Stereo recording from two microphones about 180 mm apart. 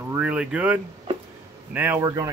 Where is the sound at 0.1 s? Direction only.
5° right (ahead or behind).